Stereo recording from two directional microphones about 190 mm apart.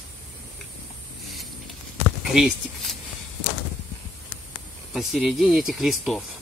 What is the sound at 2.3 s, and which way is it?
Speech, centre (ahead or behind).